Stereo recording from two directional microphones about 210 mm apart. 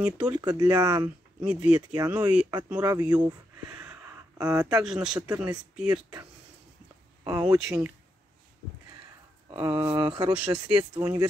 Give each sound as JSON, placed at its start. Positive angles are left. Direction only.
{"t": 0.0, "sound": "speech", "side_deg": -10}
{"t": 1.4, "sound": "speech", "side_deg": -5}
{"t": 4.8, "sound": "speech", "side_deg": -5}
{"t": 5.2, "sound": "speech", "side_deg": -15}
{"t": 7.2, "sound": "speech", "side_deg": -15}
{"t": 9.5, "sound": "speech", "side_deg": -15}
{"t": 10.4, "sound": "speech", "side_deg": -5}